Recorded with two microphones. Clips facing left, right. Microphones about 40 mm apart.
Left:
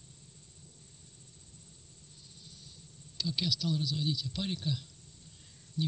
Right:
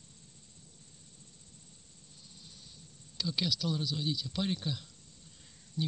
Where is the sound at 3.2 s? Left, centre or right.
Right.